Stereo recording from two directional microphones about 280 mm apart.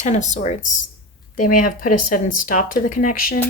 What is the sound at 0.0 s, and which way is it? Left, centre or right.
Speech, left.